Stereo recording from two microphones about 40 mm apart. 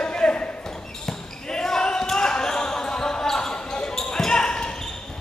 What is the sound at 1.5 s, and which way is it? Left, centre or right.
Basketball bounce, centre.